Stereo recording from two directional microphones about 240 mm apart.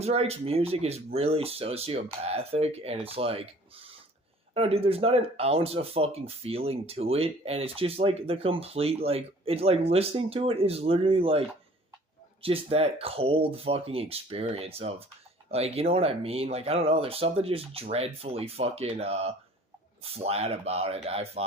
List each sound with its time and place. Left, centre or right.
0.0 s speech: right